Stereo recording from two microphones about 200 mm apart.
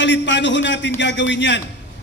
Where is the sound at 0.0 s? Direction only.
60° left (ahead or behind).